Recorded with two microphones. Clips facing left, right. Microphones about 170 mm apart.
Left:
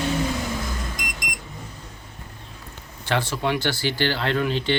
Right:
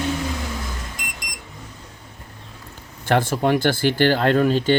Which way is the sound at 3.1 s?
50° right (ahead or behind).